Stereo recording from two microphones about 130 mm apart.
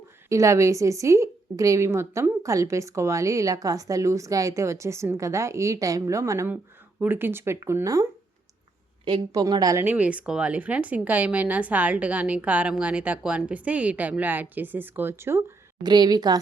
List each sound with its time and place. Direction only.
0.3 s a woman's voice: 25° right (ahead or behind)
9.3 s a woman's voice: 30° right (ahead or behind)
9.8 s speech: 10° right (ahead or behind)
15.8 s a woman's voice: 35° right (ahead or behind)